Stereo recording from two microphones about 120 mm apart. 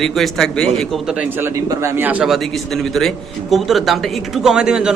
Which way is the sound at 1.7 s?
20° right (ahead or behind).